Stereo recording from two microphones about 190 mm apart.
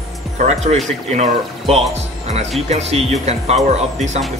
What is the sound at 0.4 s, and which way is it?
Speech, 35° right (ahead or behind).